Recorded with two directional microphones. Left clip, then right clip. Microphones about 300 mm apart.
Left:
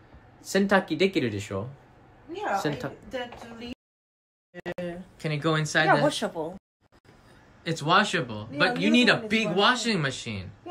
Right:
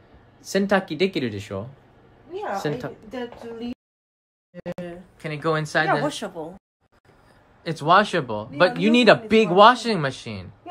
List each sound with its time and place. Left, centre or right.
0.5 s speech: centre
4.6 s speech: centre
7.6 s speech: centre